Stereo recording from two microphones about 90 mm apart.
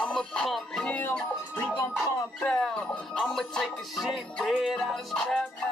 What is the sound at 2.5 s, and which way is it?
Music, 10° left (ahead or behind).